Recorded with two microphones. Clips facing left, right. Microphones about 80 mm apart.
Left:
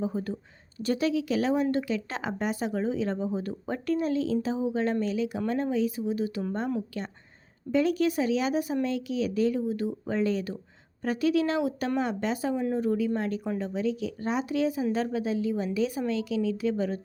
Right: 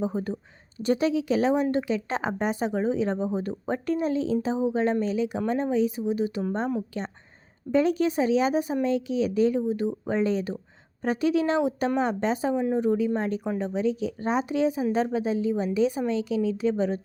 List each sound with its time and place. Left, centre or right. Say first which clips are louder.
0.0 s speech: right 2 dB; right